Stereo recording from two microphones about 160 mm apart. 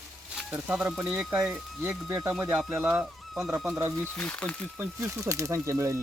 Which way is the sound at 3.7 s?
15° right (ahead or behind).